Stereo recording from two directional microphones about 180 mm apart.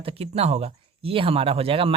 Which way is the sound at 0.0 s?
30° right (ahead or behind).